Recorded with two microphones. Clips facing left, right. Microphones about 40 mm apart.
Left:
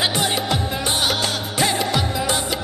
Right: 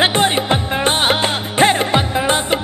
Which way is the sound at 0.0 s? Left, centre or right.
Right.